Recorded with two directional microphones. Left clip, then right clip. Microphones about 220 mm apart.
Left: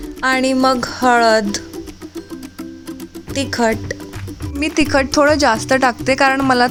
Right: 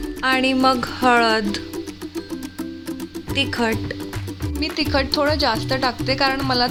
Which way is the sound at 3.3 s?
15° left (ahead or behind).